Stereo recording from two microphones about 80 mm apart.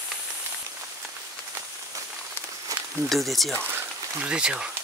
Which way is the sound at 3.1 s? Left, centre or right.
Centre.